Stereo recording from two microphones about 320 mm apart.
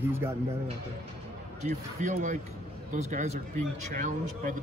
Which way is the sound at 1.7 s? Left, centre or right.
Right.